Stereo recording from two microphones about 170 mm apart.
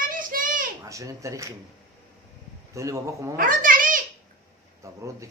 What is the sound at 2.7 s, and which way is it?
Speech, 20° right (ahead or behind).